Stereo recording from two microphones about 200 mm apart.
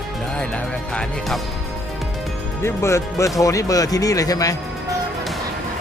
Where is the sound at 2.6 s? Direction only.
15° left (ahead or behind).